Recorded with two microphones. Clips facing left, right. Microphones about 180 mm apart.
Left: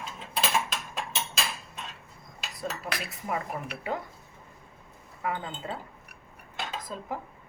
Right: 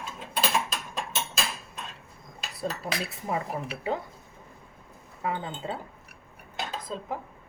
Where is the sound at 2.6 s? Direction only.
25° right (ahead or behind).